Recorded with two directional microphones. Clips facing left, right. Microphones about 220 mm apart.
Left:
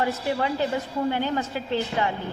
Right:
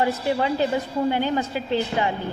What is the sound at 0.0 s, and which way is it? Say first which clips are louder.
Speech: right 3 dB; 25° right (ahead or behind).